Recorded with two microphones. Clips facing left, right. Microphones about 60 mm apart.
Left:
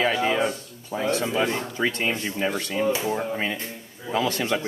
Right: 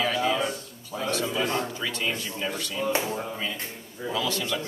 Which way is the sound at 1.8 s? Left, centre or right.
Left.